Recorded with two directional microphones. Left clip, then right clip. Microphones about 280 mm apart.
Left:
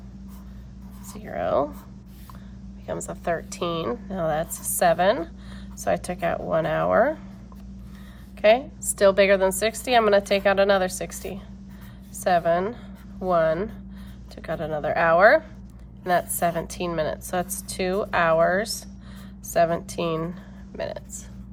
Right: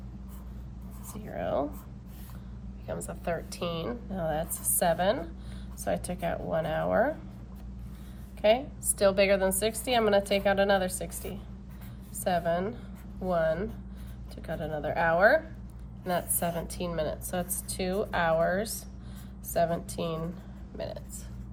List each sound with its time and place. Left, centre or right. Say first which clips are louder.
1.2 s a woman's voice: left 7 dB; left
2.8 s a woman's voice: left 6 dB; left
8.4 s a woman's voice: left 6 dB; left
12.3 s a woman's voice: left 8 dB; left